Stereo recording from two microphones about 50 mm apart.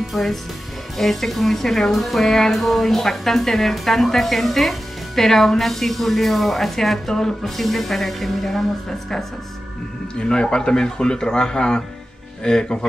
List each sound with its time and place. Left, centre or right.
0.1 s speech: centre
10.1 s speech: centre